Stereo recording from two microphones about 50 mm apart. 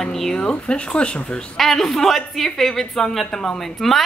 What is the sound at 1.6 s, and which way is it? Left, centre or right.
A woman's voice, centre.